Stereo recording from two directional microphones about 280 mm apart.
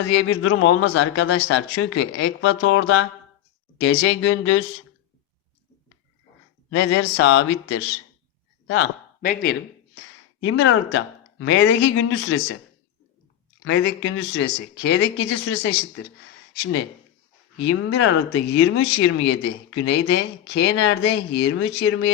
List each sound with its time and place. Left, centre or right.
0.1 s speech: left
4.3 s speech: left
6.7 s speech: left
9.2 s speech: left
10.4 s speech: left
13.6 s speech: left
17.9 s speech: left